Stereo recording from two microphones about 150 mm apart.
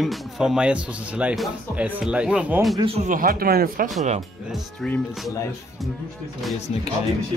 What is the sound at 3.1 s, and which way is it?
Speech, 70° right (ahead or behind).